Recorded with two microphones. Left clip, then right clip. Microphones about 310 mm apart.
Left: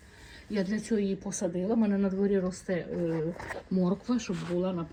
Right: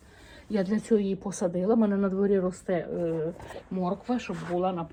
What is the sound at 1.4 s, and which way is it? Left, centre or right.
Speech, right.